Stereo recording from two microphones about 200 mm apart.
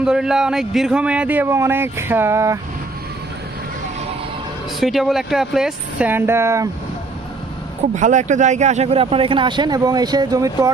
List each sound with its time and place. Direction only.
0.0 s a man's voice: 5° right (ahead or behind)
4.8 s a man's voice: centre (ahead or behind)
7.9 s speech: 40° right (ahead or behind); by 10.7 s 15° right (ahead or behind)